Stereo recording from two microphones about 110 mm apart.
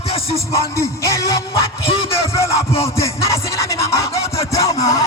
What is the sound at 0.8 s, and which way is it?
Music, 30° left (ahead or behind).